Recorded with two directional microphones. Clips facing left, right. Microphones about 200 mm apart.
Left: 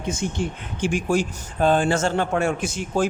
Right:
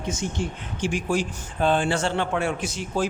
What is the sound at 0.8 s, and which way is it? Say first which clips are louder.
A man's voice: left 3 dB; 50° left (ahead or behind).